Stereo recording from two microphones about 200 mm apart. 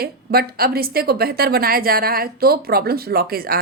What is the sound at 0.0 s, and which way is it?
A woman's voice, 50° right (ahead or behind).